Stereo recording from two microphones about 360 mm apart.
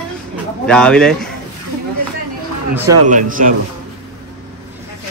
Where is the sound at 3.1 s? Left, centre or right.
Right.